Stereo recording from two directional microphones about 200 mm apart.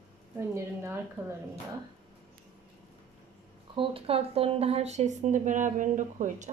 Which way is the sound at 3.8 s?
30° right (ahead or behind).